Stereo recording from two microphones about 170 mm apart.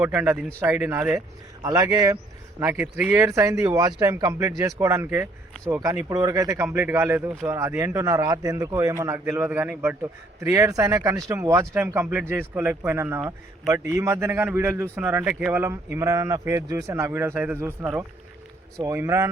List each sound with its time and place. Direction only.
0.0 s speech: 10° right (ahead or behind)
2.6 s speech: 10° right (ahead or behind)